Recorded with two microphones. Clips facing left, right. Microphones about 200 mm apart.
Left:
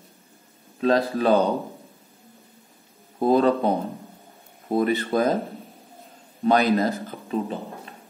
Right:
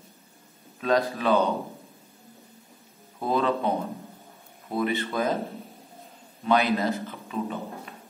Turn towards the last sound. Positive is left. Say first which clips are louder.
# left 4 dB
turn(degrees=35)  # may be behind; listen again after turning